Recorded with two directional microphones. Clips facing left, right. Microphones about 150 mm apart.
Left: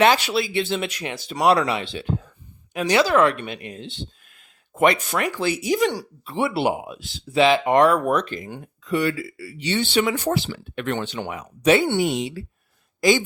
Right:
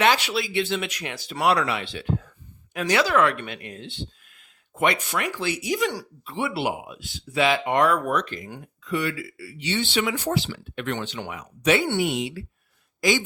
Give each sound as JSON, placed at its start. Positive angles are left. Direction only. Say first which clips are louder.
{"t": 0.0, "sound": "speech", "louder": "left 4 dB", "side_deg": 35}
{"t": 4.3, "sound": "speech", "louder": "left 3 dB", "side_deg": 40}
{"t": 7.6, "sound": "speech", "louder": "left 4 dB", "side_deg": 40}
{"t": 11.2, "sound": "speech", "louder": "left 4 dB", "side_deg": 30}